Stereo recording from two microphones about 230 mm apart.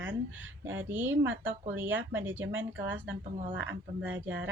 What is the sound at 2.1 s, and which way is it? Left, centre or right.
Speech, centre.